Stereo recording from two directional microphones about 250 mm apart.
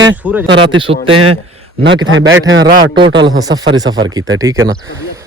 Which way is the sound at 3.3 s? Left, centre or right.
Centre.